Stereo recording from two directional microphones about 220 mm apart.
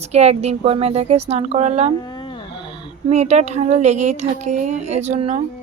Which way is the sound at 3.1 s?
30° right (ahead or behind).